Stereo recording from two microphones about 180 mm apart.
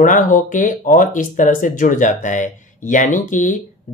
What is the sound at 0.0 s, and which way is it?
Speech, 45° left (ahead or behind).